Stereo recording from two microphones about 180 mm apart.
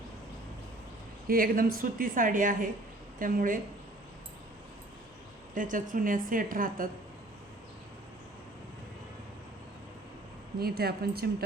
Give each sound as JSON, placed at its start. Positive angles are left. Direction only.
{"t": 1.3, "sound": "a woman's voice", "side_deg": -55}
{"t": 5.5, "sound": "a woman's voice", "side_deg": -45}
{"t": 10.6, "sound": "a woman's voice", "side_deg": -60}